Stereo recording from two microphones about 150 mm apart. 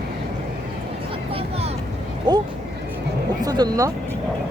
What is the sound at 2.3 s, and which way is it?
Speech, 25° right (ahead or behind).